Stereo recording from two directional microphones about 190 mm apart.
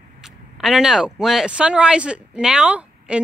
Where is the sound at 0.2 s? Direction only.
Centre (ahead or behind).